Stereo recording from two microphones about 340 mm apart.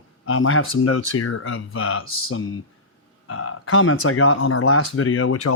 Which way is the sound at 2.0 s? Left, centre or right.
Left.